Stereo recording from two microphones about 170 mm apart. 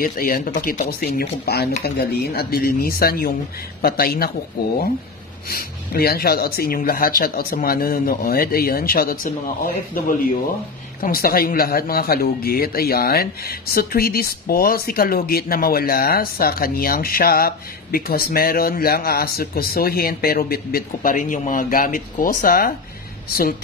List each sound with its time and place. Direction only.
0.0 s speech: 55° left (ahead or behind)
5.5 s speech: 60° left (ahead or behind)